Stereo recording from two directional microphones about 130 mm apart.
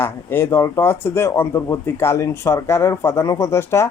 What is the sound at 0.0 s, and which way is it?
Speech, 20° left (ahead or behind).